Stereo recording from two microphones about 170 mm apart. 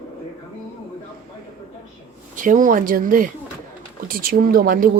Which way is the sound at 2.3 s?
50° right (ahead or behind).